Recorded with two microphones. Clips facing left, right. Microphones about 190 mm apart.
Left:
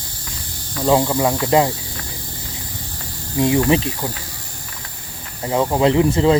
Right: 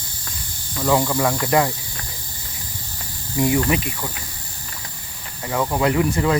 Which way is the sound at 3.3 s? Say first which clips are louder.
Left 3 dB; 20° left (ahead or behind).